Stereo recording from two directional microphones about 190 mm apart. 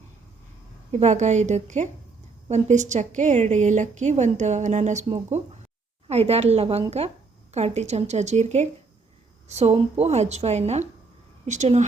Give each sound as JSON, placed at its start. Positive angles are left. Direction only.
{"t": 0.9, "sound": "a woman's voice", "side_deg": -35}